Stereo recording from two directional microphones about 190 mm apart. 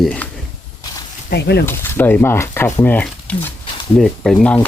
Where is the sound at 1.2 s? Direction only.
60° left (ahead or behind).